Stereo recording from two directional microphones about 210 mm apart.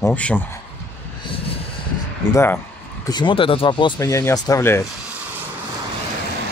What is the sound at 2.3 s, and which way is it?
Speech, 10° left (ahead or behind).